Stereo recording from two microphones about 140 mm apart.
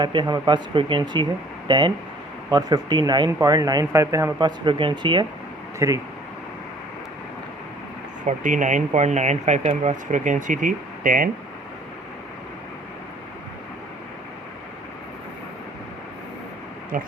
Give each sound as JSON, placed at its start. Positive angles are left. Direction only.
{"t": 0.0, "sound": "speech", "side_deg": -35}
{"t": 4.4, "sound": "speech", "side_deg": -35}
{"t": 5.8, "sound": "speech", "side_deg": -20}
{"t": 8.3, "sound": "speech", "side_deg": -60}
{"t": 16.9, "sound": "speech", "side_deg": -75}